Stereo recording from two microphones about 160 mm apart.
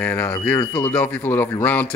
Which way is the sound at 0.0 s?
10° left (ahead or behind).